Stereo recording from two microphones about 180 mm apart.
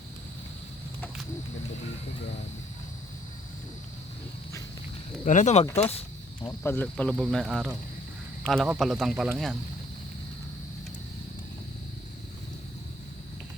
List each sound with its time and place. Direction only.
5.2 s speech: 45° left (ahead or behind)
6.5 s speech: 10° left (ahead or behind)